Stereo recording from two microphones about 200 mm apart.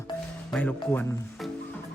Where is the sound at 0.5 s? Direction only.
10° left (ahead or behind).